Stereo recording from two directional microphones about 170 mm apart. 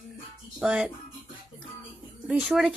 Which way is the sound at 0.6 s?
5° right (ahead or behind).